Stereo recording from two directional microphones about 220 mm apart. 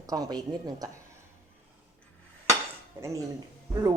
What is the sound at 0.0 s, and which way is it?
Speech, 15° right (ahead or behind).